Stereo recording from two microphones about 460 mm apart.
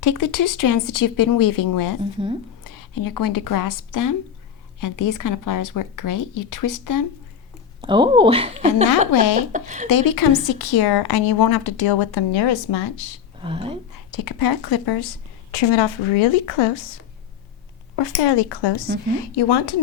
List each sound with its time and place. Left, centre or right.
0.0 s speech: left
2.0 s a woman's voice: centre
2.6 s speech: left
7.8 s a woman's voice: centre
9.9 s speech: left
13.4 s a woman's voice: centre
14.1 s speech: left
15.5 s a woman's voice: left
17.9 s speech: left